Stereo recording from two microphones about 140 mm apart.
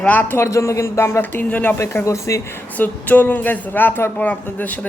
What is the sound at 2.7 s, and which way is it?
A woman's voice, 10° left (ahead or behind).